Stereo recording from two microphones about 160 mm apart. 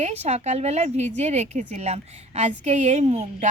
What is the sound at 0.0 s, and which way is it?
A woman's voice, 45° right (ahead or behind).